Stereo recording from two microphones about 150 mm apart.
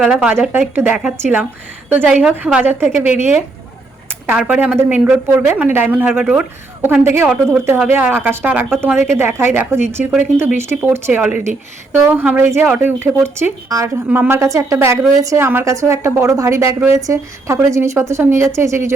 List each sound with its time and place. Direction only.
0.0 s a woman's voice: 5° right (ahead or behind)